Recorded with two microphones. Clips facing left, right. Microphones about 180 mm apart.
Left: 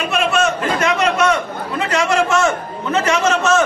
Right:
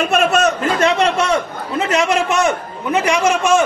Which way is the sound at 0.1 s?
40° right (ahead or behind).